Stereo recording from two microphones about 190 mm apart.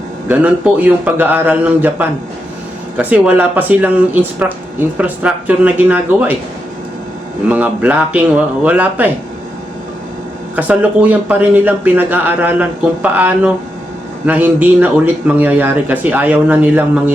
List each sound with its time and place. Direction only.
0.3 s speech: 10° right (ahead or behind)
7.4 s speech: 10° right (ahead or behind)
10.5 s speech: 10° right (ahead or behind)